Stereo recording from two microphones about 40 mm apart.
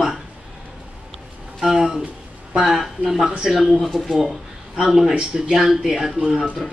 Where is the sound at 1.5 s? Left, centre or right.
Centre.